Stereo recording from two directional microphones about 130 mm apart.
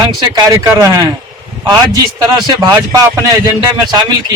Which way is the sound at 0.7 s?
25° right (ahead or behind).